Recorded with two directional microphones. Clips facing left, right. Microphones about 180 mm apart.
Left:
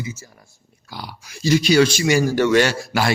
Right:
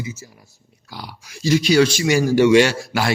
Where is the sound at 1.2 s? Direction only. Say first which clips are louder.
Even; 50° left (ahead or behind).